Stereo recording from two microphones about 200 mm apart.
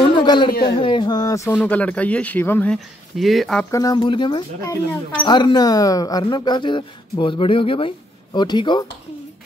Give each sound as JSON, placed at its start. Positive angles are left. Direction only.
{"t": 0.1, "sound": "a sound", "side_deg": 25}
{"t": 0.7, "sound": "speech", "side_deg": 25}
{"t": 3.7, "sound": "speech", "side_deg": 20}